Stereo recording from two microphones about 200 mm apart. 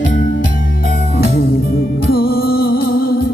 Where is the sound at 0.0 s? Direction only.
40° left (ahead or behind).